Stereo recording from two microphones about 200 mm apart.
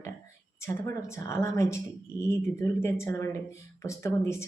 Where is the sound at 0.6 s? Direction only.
15° left (ahead or behind).